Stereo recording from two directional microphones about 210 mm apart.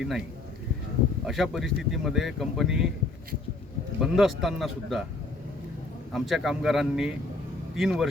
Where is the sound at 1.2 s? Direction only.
Centre (ahead or behind).